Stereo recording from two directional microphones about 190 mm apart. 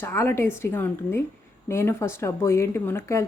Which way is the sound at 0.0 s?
10° left (ahead or behind).